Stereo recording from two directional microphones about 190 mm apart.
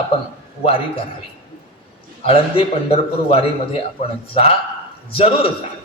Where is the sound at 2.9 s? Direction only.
30° left (ahead or behind).